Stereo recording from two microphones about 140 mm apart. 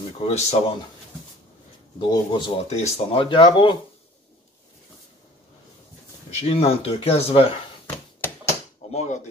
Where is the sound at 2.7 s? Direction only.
55° left (ahead or behind).